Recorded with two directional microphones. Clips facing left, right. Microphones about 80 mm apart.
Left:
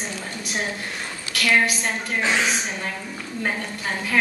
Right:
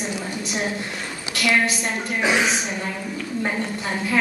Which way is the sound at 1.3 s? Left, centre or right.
Right.